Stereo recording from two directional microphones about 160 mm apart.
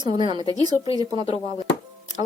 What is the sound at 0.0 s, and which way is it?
Speech, 30° right (ahead or behind).